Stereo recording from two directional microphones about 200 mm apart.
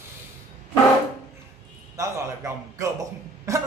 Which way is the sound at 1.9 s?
15° right (ahead or behind).